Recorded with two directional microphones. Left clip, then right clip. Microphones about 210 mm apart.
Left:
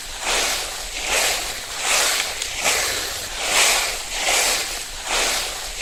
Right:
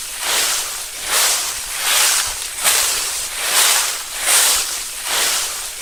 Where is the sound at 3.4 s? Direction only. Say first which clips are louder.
Right 1 dB; 25° right (ahead or behind).